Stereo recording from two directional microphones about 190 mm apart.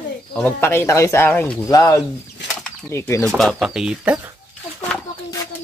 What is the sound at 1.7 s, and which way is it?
Speech, 20° left (ahead or behind).